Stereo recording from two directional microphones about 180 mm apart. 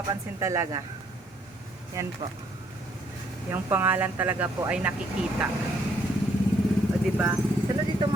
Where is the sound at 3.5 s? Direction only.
10° right (ahead or behind).